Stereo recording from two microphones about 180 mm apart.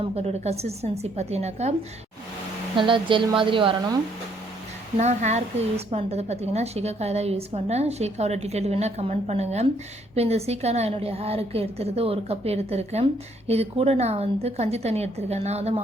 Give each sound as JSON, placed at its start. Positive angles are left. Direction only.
{"t": 0.0, "sound": "a woman's voice", "side_deg": -35}
{"t": 2.7, "sound": "a woman's voice", "side_deg": -30}
{"t": 4.9, "sound": "a woman's voice", "side_deg": -40}